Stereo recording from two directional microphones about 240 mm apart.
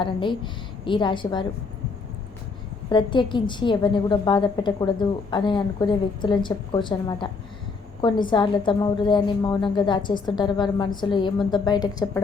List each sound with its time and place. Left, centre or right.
0.0 s a woman's voice: centre
2.9 s a woman's voice: centre